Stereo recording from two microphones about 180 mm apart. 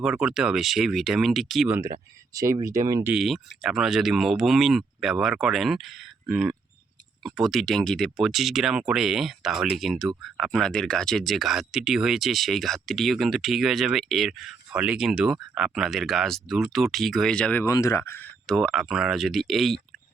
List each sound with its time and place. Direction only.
0.0 s speech: 5° right (ahead or behind)
1.7 s speech: 15° right (ahead or behind); by 19.8 s centre (ahead or behind)